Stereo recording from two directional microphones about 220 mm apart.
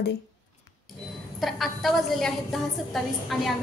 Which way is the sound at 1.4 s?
Centre (ahead or behind).